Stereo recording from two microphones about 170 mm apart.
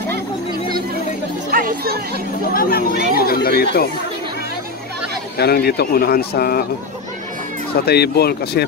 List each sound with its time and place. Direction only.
1.5 s chatter: 60° right (ahead or behind)
2.5 s speech: 60° left (ahead or behind)
5.4 s speech: 70° left (ahead or behind)
7.8 s speech: 70° left (ahead or behind)